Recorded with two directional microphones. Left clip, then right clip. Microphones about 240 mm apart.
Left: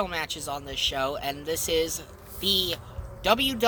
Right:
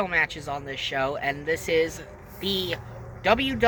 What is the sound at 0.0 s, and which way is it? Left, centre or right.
Speech, centre.